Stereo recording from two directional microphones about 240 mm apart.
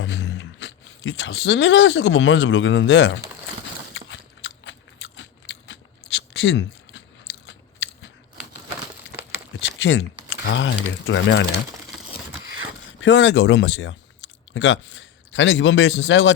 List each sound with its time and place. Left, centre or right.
0.0 s speech: left
3.9 s biting: left
9.7 s a sound: left
11.0 s speech: left
13.0 s speech: left